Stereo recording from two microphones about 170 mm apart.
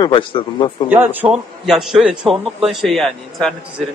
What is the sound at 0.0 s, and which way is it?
Speech, 30° left (ahead or behind).